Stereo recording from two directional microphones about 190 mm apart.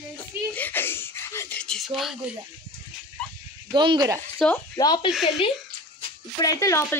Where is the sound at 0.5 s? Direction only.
10° left (ahead or behind).